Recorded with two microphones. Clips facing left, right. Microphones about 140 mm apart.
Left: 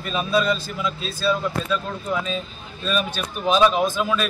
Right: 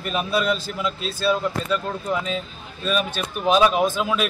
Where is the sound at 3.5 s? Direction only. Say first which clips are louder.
Even; 10° right (ahead or behind).